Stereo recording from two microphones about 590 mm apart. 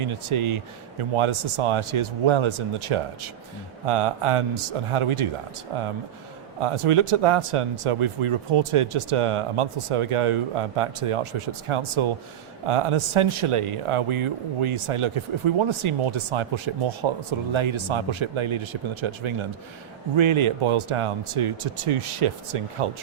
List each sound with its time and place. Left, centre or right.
0.0 s speech: right